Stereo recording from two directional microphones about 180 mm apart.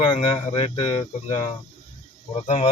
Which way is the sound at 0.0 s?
25° left (ahead or behind).